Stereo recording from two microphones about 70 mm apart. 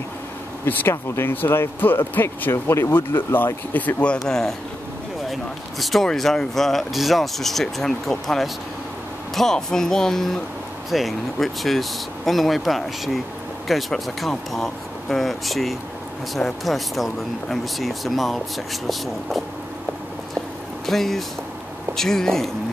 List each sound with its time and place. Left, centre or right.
0.7 s speech: left
2.5 s speech: left
3.7 s speech: centre
4.3 s speech: centre
20.8 s speech: centre